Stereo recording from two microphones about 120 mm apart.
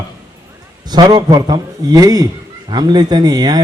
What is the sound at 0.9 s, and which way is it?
A man's voice, 35° right (ahead or behind).